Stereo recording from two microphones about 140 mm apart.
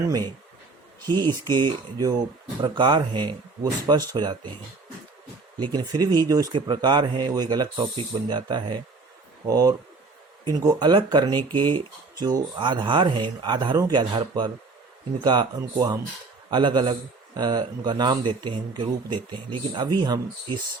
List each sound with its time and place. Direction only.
1.0 s a man's voice: 30° right (ahead or behind)
5.5 s a man's voice: 30° right (ahead or behind)